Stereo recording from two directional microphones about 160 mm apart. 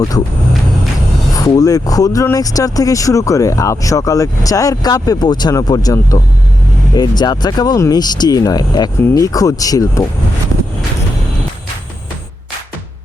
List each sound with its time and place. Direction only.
1.5 s speech: 20° left (ahead or behind)